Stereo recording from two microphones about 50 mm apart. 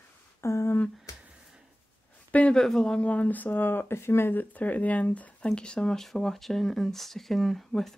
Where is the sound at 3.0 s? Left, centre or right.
Left.